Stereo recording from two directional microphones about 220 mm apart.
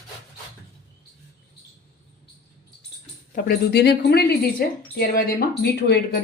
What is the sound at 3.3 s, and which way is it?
A woman's voice, 45° left (ahead or behind).